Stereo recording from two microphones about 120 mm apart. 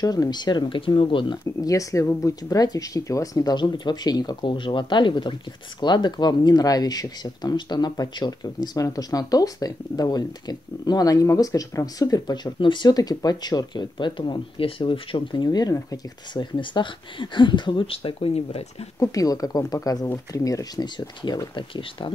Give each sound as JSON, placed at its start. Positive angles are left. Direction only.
{"t": 0.0, "sound": "speech", "side_deg": 35}
{"t": 1.4, "sound": "speech", "side_deg": 30}
{"t": 16.5, "sound": "speech", "side_deg": 40}
{"t": 18.9, "sound": "speech", "side_deg": 30}